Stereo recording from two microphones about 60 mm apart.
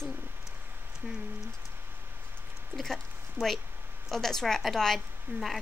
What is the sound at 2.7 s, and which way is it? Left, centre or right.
A woman's voice, centre.